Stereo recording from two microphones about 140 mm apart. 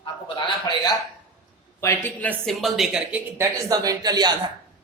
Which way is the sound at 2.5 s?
Centre (ahead or behind).